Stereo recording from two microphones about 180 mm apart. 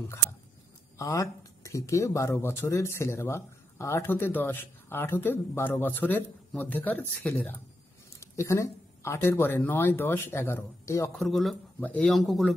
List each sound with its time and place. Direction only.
0.9 s speech: 15° left (ahead or behind)
11.2 s speech: centre (ahead or behind)